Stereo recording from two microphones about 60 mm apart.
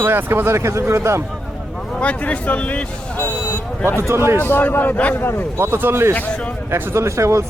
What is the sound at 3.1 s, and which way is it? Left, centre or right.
Vehicle, left.